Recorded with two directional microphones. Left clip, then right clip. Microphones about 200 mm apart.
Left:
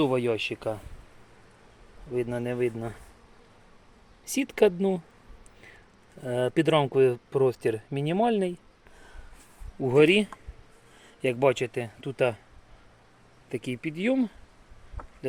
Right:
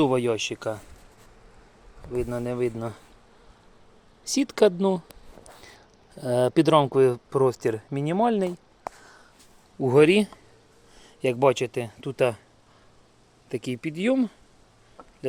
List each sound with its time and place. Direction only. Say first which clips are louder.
0.0 s speech: right 3 dB; 15° right (ahead or behind)
2.1 s speech: right 1 dB; 5° right (ahead or behind)
4.3 s speech: right 2 dB; 20° right (ahead or behind)
6.1 s speech: right 5 dB; 30° right (ahead or behind); by 8.5 s 10° right (ahead or behind)
9.8 s speech: right 2 dB; 25° right (ahead or behind)
11.0 s speech: right 3 dB; 10° right (ahead or behind)
13.5 s speech: right 2 dB; 15° right (ahead or behind)